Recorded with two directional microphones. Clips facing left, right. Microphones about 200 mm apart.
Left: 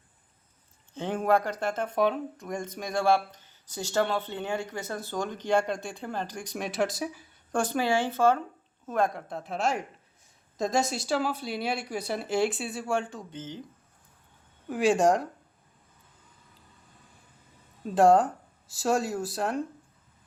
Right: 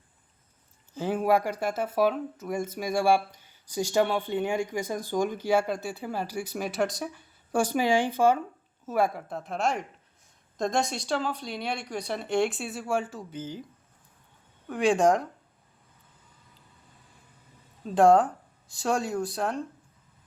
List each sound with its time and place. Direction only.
0.9 s speech: 5° right (ahead or behind)
7.5 s speech: 10° right (ahead or behind)
14.7 s speech: 5° left (ahead or behind)
17.8 s speech: centre (ahead or behind)